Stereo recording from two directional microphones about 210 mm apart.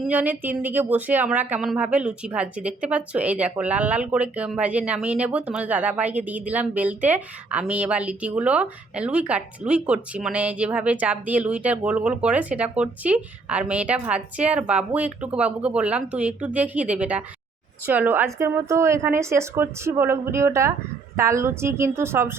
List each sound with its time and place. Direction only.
0.0 s speech: 10° right (ahead or behind)